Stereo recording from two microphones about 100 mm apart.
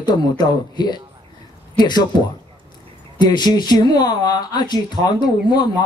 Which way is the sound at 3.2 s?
45° left (ahead or behind).